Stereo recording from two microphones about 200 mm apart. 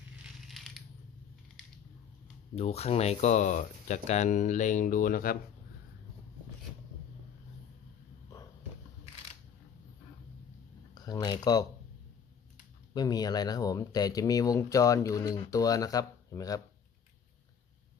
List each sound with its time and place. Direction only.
0.4 s crushing: centre (ahead or behind)
2.6 s speech: 30° left (ahead or behind)
10.9 s speech: 20° left (ahead or behind)
12.9 s speech: 20° left (ahead or behind)